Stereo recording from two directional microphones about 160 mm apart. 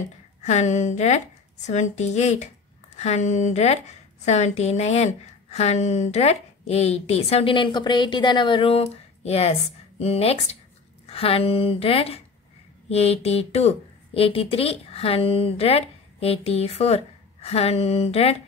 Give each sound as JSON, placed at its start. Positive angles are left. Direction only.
{"t": 0.4, "sound": "speech", "side_deg": 45}